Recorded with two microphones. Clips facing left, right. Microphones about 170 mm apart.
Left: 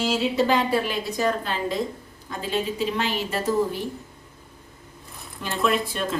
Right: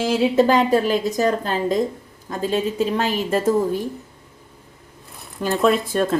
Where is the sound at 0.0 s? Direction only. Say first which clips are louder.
Right 6 dB; 50° right (ahead or behind).